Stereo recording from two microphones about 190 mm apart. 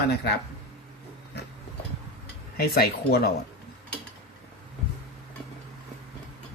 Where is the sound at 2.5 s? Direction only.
55° left (ahead or behind).